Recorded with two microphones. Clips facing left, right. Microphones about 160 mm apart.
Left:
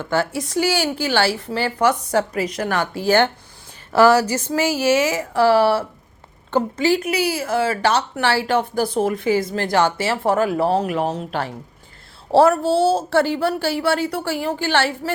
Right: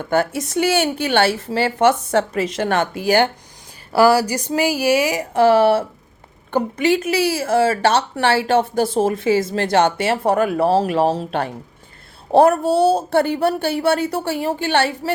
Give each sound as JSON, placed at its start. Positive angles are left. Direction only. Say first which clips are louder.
{"t": 0.2, "sound": "speech", "louder": "right 1 dB", "side_deg": -20}
{"t": 12.3, "sound": "speech", "louder": "right 1 dB", "side_deg": -20}